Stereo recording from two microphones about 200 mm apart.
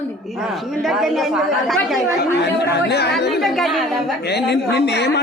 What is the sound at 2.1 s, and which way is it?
Speech, 55° left (ahead or behind).